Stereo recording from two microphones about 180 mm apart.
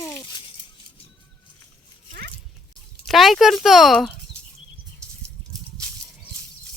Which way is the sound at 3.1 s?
Centre (ahead or behind).